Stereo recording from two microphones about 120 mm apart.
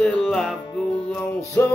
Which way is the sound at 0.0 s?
5° left (ahead or behind).